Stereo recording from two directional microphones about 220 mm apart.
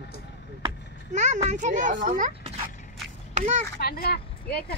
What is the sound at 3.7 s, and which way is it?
Speech, 45° left (ahead or behind).